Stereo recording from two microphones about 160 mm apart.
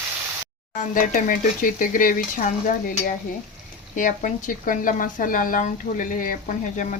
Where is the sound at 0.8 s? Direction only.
55° left (ahead or behind).